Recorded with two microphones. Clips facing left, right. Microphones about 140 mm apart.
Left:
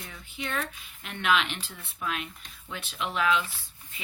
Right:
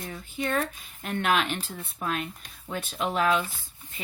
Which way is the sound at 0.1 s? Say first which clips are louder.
Right 6 dB; 40° right (ahead or behind).